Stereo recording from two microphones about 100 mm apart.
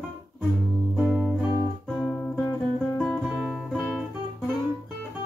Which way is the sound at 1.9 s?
15° left (ahead or behind).